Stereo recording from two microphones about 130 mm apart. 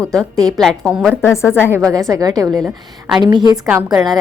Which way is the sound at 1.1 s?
20° left (ahead or behind).